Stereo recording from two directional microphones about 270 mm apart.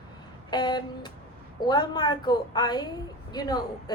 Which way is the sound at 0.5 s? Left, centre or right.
Centre.